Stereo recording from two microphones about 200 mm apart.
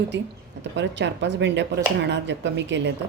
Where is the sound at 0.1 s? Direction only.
65° right (ahead or behind).